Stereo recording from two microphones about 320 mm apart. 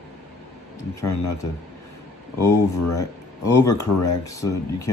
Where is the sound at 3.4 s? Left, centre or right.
Centre.